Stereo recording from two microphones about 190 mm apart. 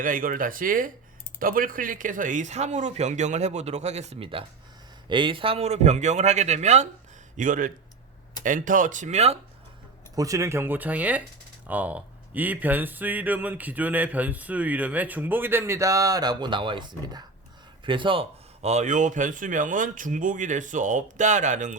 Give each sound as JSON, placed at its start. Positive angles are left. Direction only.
{"t": 0.0, "sound": "speech", "side_deg": -45}
{"t": 10.2, "sound": "speech", "side_deg": -15}